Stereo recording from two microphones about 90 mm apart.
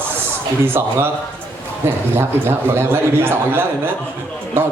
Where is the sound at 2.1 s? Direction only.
25° right (ahead or behind).